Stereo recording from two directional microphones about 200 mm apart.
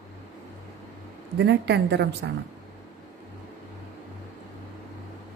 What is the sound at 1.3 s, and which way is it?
Speech, 60° right (ahead or behind).